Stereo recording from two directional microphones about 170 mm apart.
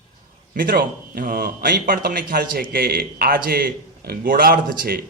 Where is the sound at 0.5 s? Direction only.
60° right (ahead or behind).